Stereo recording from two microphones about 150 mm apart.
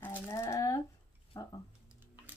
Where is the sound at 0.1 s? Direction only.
20° left (ahead or behind).